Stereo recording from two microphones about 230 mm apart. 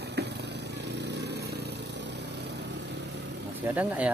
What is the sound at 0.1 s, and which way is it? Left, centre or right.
Vehicle, right.